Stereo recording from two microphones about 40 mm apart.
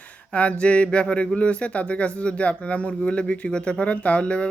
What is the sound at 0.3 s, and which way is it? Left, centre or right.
Speech, left.